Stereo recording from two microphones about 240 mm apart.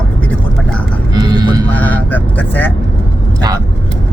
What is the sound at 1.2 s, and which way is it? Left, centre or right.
Music, centre.